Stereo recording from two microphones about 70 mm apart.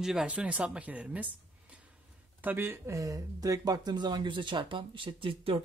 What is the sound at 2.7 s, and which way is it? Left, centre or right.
Speech, right.